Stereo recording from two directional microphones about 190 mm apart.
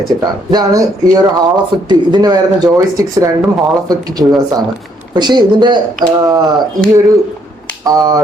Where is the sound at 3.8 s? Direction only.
20° right (ahead or behind).